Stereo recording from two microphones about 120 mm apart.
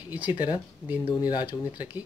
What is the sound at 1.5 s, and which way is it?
Speech, 15° right (ahead or behind).